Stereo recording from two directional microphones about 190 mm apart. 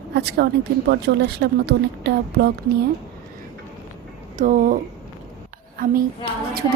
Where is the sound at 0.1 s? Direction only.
60° right (ahead or behind).